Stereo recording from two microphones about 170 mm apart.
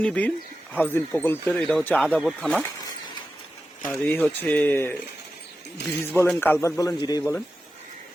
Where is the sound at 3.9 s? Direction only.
10° left (ahead or behind).